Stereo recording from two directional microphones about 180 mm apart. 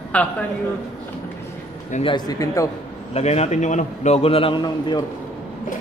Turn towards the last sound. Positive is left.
turn(degrees=25)  # may be behind; listen again after turning